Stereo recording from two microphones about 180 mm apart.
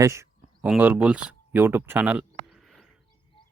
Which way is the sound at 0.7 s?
10° right (ahead or behind).